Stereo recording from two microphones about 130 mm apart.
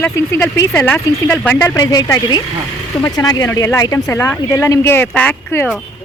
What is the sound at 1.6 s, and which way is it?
Speech, 25° left (ahead or behind).